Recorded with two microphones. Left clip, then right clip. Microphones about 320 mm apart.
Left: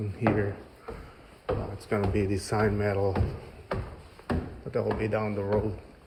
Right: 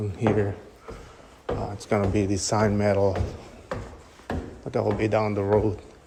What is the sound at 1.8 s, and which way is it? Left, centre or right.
Speech, centre.